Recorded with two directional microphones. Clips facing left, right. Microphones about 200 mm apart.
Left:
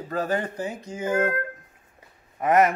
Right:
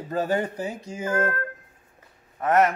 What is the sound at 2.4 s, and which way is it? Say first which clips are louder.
Speech: left 1 dB; 10° left (ahead or behind).